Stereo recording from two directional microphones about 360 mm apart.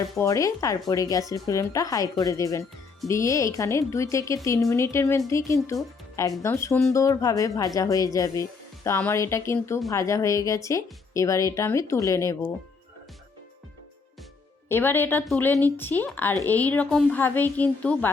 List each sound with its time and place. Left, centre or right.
0.0 s speech: centre
14.7 s a woman's voice: centre